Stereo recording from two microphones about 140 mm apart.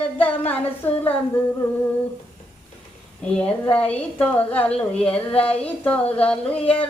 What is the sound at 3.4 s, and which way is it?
Child singing, 10° left (ahead or behind).